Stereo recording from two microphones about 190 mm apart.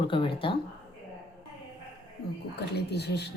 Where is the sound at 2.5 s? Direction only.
60° left (ahead or behind).